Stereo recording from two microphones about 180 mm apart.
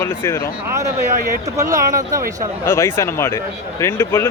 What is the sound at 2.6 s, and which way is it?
Speech, 15° left (ahead or behind).